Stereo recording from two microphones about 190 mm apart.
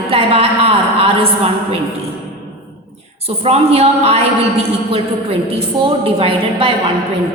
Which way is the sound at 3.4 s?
30° right (ahead or behind).